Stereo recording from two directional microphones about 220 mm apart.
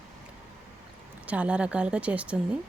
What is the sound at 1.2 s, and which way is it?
Speech, 5° right (ahead or behind).